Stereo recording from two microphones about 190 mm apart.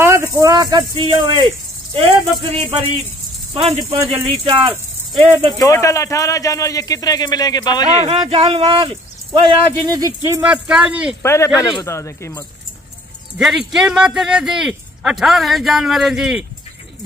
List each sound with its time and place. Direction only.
0.0 s a sound: 15° right (ahead or behind)
2.0 s speech: 30° right (ahead or behind)
3.6 s speech: 30° right (ahead or behind)
5.6 s speech: 15° left (ahead or behind)
8.1 s speech: 30° right (ahead or behind)
10.4 s speech: 5° right (ahead or behind)
11.2 s speech: 15° left (ahead or behind)
13.4 s speech: centre (ahead or behind)